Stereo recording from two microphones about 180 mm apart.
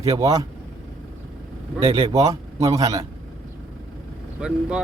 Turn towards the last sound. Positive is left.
turn(degrees=-5)  # may be behind; listen again after turning